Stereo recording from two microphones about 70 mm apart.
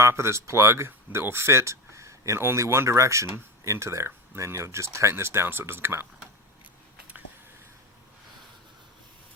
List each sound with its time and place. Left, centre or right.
0.0 s speech: right